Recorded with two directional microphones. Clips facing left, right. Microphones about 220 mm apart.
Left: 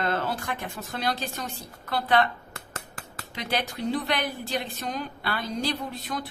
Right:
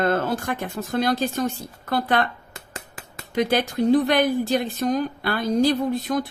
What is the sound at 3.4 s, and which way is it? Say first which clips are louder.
A woman's voice: right 9 dB; 50° right (ahead or behind).